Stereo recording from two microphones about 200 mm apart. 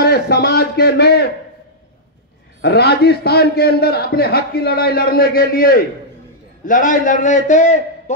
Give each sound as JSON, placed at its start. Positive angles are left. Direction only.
{"t": 0.0, "sound": "a man's voice", "side_deg": 55}
{"t": 2.6, "sound": "a man's voice", "side_deg": 55}